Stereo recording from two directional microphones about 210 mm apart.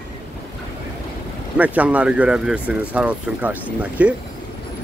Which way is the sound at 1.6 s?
5° right (ahead or behind).